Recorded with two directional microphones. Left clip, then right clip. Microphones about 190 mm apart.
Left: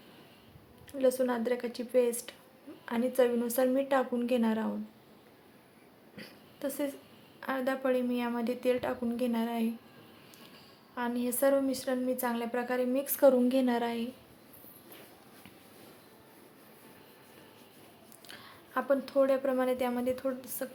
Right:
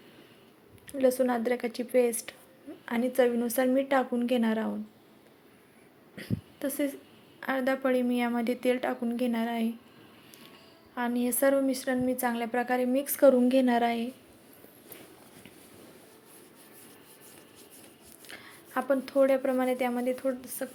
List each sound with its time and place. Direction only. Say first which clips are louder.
0.9 s a woman's voice: right 3 dB; 15° right (ahead or behind)
6.1 s a sound: right 7 dB; 15° right (ahead or behind)
7.3 s a woman's voice: right 4 dB; 15° right (ahead or behind)
10.9 s a woman's voice: right 3 dB; 15° right (ahead or behind)
18.3 s a woman's voice: right 3 dB; 10° right (ahead or behind)